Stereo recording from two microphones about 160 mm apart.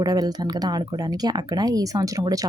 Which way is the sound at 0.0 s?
25° right (ahead or behind).